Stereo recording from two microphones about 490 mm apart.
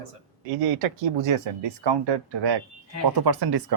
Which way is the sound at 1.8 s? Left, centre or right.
Right.